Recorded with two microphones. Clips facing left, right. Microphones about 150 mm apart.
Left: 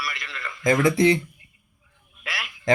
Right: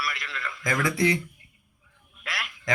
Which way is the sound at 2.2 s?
Centre (ahead or behind).